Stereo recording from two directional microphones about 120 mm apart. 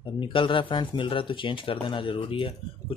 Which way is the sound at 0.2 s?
45° left (ahead or behind).